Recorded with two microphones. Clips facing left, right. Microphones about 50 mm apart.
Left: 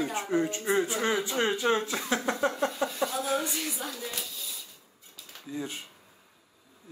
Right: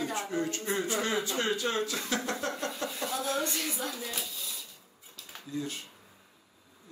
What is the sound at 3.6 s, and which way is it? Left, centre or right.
Speech, centre.